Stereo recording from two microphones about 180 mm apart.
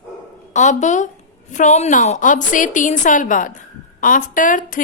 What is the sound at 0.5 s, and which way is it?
A woman's voice, 40° left (ahead or behind).